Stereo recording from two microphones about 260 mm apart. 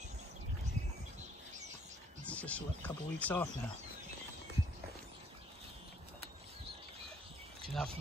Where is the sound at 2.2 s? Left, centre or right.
Centre.